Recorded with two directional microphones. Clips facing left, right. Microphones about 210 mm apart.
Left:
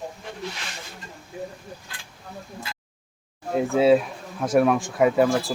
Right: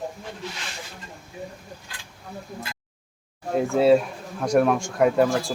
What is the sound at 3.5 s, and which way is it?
Speech, centre (ahead or behind).